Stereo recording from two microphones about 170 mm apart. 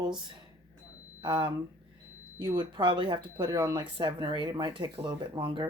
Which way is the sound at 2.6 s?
25° right (ahead or behind).